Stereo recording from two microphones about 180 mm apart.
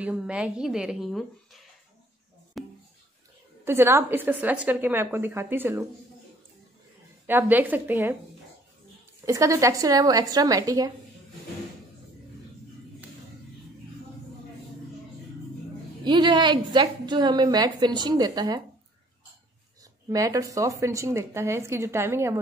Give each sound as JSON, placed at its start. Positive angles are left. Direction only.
{"t": 0.0, "sound": "a woman's voice", "side_deg": -5}
{"t": 2.6, "sound": "a sound", "side_deg": 0}
{"t": 3.6, "sound": "a woman's voice", "side_deg": -15}
{"t": 7.2, "sound": "a woman's voice", "side_deg": -10}
{"t": 9.2, "sound": "a woman's voice", "side_deg": -15}
{"t": 16.0, "sound": "a woman's voice", "side_deg": -25}
{"t": 19.8, "sound": "a woman's voice", "side_deg": -20}